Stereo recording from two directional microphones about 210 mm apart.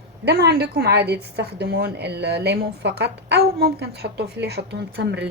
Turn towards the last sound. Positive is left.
turn(degrees=-55)  # may be behind; listen again after turning